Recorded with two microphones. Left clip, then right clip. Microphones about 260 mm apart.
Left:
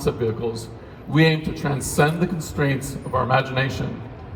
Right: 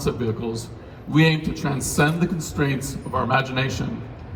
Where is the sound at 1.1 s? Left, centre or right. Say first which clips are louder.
Left 1 dB; left.